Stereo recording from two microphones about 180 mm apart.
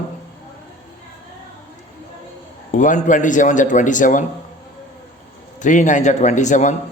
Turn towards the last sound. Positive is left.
turn(degrees=45)  # may be behind; listen again after turning